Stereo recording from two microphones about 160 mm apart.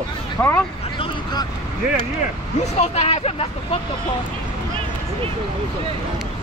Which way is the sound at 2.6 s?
45° left (ahead or behind).